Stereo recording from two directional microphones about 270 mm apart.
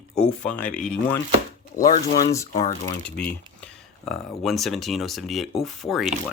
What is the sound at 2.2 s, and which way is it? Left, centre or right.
Speech, centre.